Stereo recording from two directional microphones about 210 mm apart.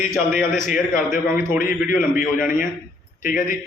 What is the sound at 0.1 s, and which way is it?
Speech, centre (ahead or behind).